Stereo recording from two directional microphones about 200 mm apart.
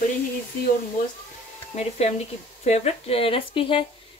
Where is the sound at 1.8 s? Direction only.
30° left (ahead or behind).